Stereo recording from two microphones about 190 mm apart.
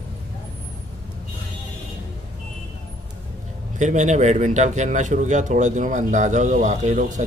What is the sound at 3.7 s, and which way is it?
A man's voice, 40° right (ahead or behind).